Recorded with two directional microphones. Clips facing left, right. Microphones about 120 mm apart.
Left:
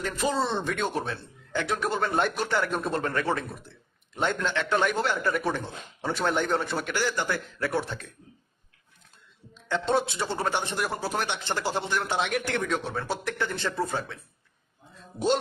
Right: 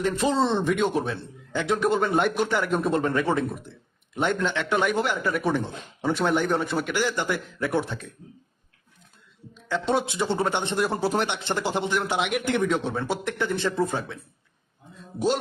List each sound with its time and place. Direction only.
0.0 s speech: 25° right (ahead or behind)
9.6 s speech: 10° right (ahead or behind)